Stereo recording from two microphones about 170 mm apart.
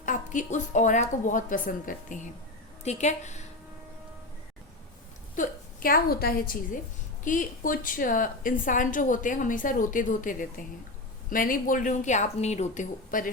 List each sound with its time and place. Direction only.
0.0 s a woman's voice: 50° left (ahead or behind)
5.4 s a woman's voice: 60° left (ahead or behind)